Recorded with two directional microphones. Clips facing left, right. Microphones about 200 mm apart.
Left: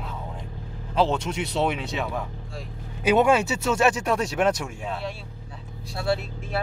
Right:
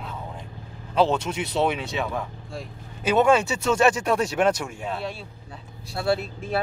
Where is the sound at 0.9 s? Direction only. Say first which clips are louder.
Right 2 dB; centre (ahead or behind).